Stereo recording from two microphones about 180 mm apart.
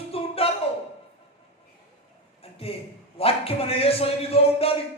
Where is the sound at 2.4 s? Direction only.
35° left (ahead or behind).